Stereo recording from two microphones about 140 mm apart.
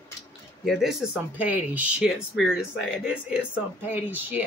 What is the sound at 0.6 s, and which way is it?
A woman's voice, centre (ahead or behind).